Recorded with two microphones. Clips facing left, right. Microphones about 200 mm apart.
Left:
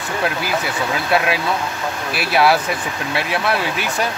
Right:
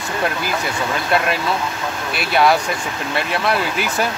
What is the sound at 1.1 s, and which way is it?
Speech, 5° left (ahead or behind).